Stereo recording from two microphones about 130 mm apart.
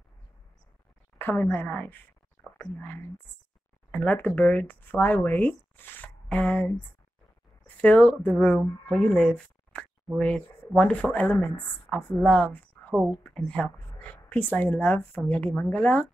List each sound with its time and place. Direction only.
1.1 s a woman's voice: 15° left (ahead or behind)